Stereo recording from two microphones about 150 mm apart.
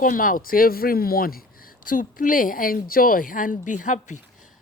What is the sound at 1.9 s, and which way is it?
Speech, 65° left (ahead or behind).